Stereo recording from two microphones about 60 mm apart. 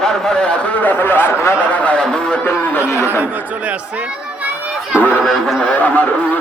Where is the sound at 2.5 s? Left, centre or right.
Left.